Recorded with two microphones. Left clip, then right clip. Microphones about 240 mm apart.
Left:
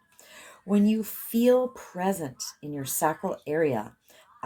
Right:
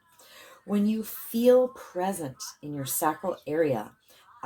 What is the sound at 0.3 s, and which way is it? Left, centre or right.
Speech, left.